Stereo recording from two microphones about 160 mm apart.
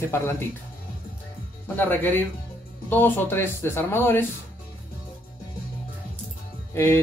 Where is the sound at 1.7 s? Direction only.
10° left (ahead or behind).